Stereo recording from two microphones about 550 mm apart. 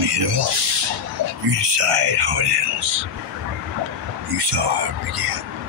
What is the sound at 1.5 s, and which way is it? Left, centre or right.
Speech, right.